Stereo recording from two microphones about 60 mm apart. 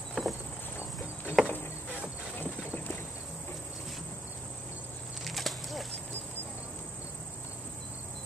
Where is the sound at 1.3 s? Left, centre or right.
Left.